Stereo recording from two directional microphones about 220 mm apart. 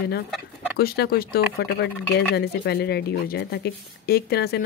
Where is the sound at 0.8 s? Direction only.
45° left (ahead or behind).